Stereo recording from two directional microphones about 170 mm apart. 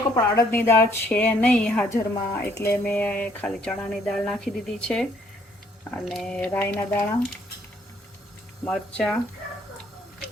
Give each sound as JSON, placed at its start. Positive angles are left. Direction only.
{"t": 0.3, "sound": "speech", "side_deg": 15}
{"t": 8.6, "sound": "speech", "side_deg": 5}